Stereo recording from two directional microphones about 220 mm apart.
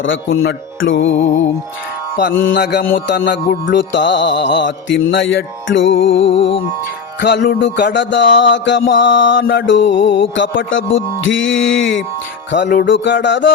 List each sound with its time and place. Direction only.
0.0 s music: 55° left (ahead or behind)
2.4 s music: 50° left (ahead or behind)